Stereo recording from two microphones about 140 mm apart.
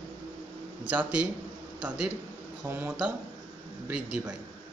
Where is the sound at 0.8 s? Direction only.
10° right (ahead or behind).